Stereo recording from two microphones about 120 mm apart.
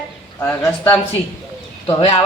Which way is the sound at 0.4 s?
25° left (ahead or behind).